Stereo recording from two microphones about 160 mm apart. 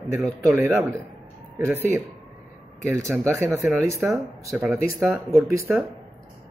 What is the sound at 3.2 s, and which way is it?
Speech, 15° right (ahead or behind).